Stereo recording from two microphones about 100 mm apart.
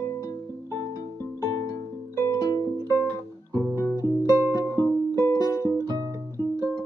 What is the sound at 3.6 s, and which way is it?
Music, 25° right (ahead or behind).